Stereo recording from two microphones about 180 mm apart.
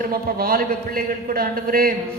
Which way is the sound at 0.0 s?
55° right (ahead or behind).